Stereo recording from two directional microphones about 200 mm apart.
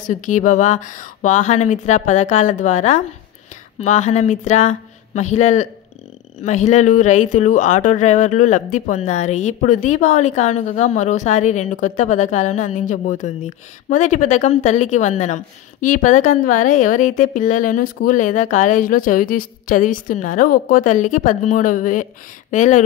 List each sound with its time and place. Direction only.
0.0 s a woman's voice: 40° left (ahead or behind)